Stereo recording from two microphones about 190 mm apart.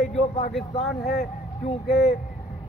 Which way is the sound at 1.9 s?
Centre (ahead or behind).